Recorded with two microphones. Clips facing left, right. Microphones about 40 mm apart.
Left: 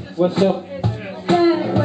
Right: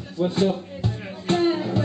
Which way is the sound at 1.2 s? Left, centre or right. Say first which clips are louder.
Left 6 dB; left.